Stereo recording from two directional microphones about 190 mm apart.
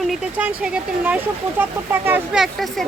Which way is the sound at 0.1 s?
5° right (ahead or behind).